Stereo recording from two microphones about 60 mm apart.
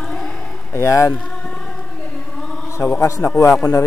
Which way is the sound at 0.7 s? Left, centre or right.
Left.